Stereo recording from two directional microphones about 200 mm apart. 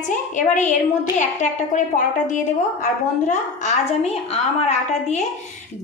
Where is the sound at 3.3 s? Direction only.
35° left (ahead or behind).